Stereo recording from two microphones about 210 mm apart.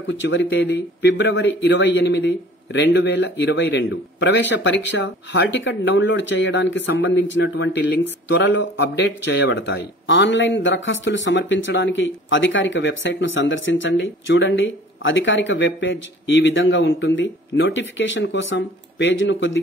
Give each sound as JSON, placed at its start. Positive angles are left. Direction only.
{"t": 0.0, "sound": "speech", "side_deg": 60}